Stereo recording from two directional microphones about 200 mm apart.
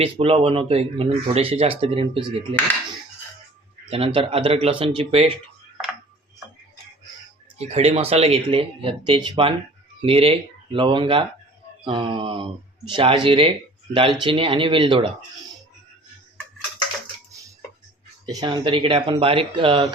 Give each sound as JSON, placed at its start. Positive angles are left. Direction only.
{"t": 0.0, "sound": "speech", "side_deg": -30}
{"t": 3.8, "sound": "speech", "side_deg": -30}
{"t": 7.6, "sound": "speech", "side_deg": -30}
{"t": 18.3, "sound": "speech", "side_deg": -20}